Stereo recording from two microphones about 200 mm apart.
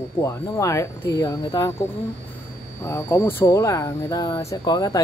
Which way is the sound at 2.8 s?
15° left (ahead or behind).